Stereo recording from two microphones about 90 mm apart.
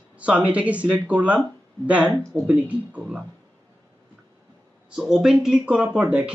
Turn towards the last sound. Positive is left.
turn(degrees=-10)  # may be behind; listen again after turning